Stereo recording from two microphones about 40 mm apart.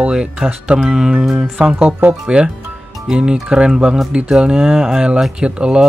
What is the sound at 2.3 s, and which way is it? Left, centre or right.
Music, centre.